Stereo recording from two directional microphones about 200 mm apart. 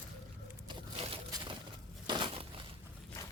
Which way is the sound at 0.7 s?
25° right (ahead or behind).